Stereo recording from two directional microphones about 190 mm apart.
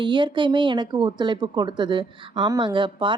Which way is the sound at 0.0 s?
25° right (ahead or behind).